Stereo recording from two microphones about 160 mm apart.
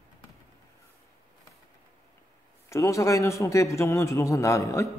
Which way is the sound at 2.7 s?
20° left (ahead or behind).